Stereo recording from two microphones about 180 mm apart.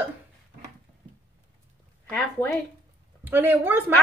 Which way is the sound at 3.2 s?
10° right (ahead or behind).